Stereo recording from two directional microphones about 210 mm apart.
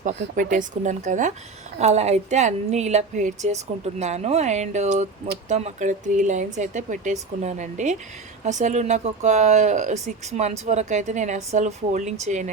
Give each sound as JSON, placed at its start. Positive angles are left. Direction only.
{"t": 0.0, "sound": "speech", "side_deg": -35}